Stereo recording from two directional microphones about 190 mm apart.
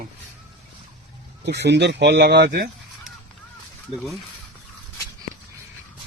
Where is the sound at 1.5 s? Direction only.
65° right (ahead or behind).